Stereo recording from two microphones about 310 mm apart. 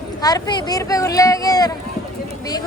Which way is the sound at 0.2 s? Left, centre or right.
Centre.